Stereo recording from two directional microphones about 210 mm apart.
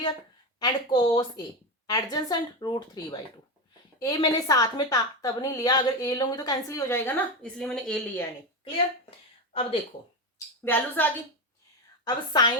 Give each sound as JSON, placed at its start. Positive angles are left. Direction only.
{"t": 0.6, "sound": "a woman's voice", "side_deg": 20}
{"t": 9.0, "sound": "a sound", "side_deg": 30}
{"t": 10.3, "sound": "a woman's voice", "side_deg": 10}
{"t": 12.0, "sound": "speech", "side_deg": 20}